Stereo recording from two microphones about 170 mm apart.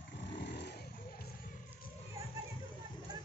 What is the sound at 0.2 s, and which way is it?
Vehicle, 80° left.